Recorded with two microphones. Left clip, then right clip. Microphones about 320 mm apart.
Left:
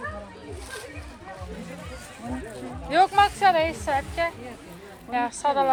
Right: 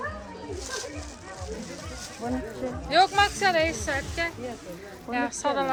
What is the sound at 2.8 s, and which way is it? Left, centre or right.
A woman's voice, centre.